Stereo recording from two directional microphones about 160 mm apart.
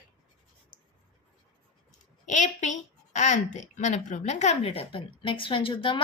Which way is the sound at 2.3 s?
50° left (ahead or behind).